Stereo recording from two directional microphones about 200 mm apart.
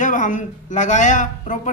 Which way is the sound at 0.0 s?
40° left (ahead or behind).